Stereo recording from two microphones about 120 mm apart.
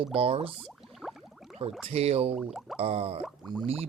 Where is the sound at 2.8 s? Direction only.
55° right (ahead or behind).